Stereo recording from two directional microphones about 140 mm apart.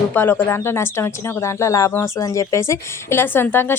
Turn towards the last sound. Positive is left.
turn(degrees=15)  # may be behind; listen again after turning